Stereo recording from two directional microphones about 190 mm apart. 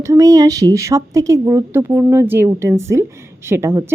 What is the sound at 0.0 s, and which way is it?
A woman's voice, 15° right (ahead or behind).